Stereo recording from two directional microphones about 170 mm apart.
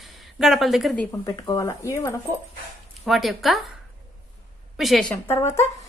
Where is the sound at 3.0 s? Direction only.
Centre (ahead or behind).